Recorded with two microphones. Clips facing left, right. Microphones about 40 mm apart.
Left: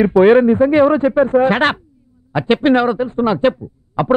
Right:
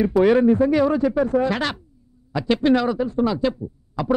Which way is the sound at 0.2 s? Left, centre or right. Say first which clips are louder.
Left 6 dB; left.